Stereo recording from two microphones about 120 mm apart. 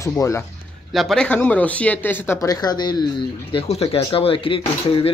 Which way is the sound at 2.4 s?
35° left (ahead or behind).